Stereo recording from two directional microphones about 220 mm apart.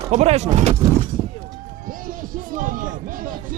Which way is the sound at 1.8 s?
40° right (ahead or behind).